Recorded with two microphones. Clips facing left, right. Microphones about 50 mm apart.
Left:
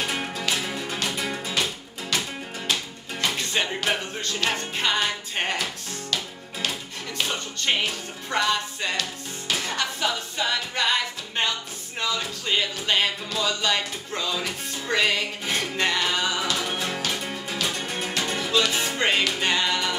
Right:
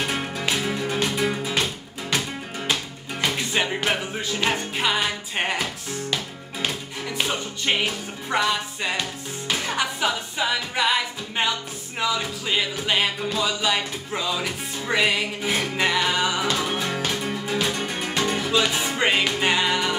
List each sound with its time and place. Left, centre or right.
0.0 s music: centre
3.3 s music: centre